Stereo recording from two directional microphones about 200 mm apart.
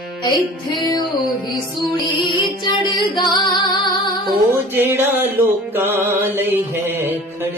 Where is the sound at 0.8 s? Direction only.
20° left (ahead or behind).